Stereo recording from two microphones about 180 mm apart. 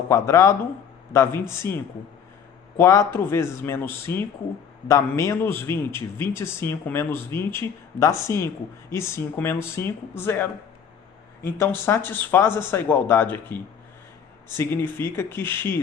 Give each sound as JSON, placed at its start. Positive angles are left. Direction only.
{"t": 0.1, "sound": "a man's voice", "side_deg": 15}
{"t": 11.9, "sound": "a man's voice", "side_deg": 15}